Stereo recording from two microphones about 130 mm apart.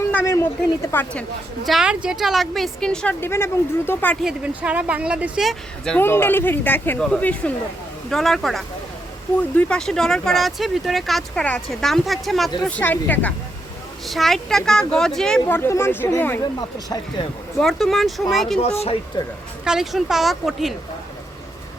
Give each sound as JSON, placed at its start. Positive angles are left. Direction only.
{"t": 0.1, "sound": "a sound", "side_deg": 20}
{"t": 0.9, "sound": "speech", "side_deg": 15}
{"t": 1.6, "sound": "speech", "side_deg": -5}
{"t": 3.2, "sound": "speech", "side_deg": 20}
{"t": 4.2, "sound": "speech", "side_deg": -5}
{"t": 6.0, "sound": "speech", "side_deg": 15}
{"t": 12.6, "sound": "speech", "side_deg": 10}
{"t": 14.1, "sound": "speech", "side_deg": 0}
{"t": 15.4, "sound": "speech", "side_deg": 20}
{"t": 16.4, "sound": "speech", "side_deg": 30}
{"t": 17.6, "sound": "speech", "side_deg": 0}
{"t": 19.2, "sound": "speech", "side_deg": 35}
{"t": 19.6, "sound": "speech", "side_deg": -5}